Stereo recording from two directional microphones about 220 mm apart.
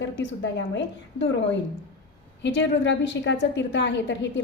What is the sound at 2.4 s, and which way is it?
A woman's voice, 55° left (ahead or behind).